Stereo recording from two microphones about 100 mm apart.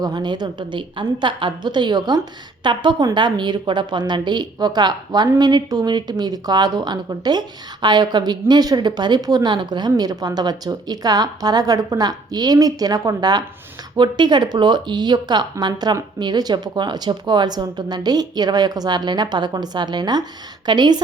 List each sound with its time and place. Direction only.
0.0 s a woman's voice: 45° right (ahead or behind)